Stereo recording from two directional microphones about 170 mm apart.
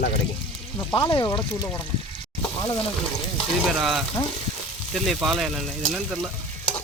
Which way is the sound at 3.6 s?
Centre (ahead or behind).